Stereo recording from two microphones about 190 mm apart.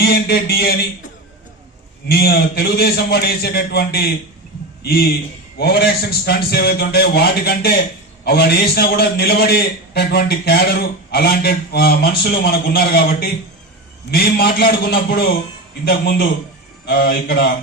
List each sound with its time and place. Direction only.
0.0 s a man's voice: 55° left (ahead or behind)
2.0 s a man's voice: 55° left (ahead or behind)